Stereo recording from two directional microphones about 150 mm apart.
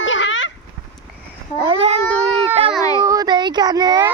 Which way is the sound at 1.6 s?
35° right (ahead or behind).